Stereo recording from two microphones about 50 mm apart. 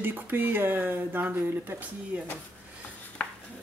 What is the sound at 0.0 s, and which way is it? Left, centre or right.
Speech, right.